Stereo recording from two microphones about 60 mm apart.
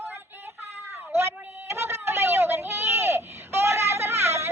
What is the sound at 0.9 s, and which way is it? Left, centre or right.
Cat, right.